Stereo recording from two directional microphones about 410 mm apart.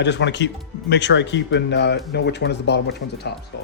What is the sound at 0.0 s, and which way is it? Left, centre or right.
Speech, left.